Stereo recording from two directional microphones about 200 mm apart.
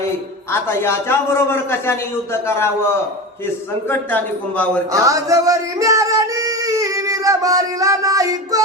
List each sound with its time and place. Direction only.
0.7 s a man's voice: 15° left (ahead or behind)
4.9 s music: 15° right (ahead or behind)